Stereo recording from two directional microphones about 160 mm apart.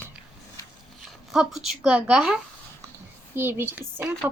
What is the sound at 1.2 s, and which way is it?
Speech, centre (ahead or behind).